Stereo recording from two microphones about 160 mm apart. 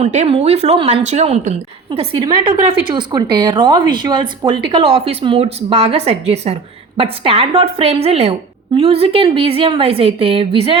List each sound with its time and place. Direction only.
0.0 s a woman's voice: 45° right (ahead or behind)
2.1 s a woman's voice: 25° right (ahead or behind)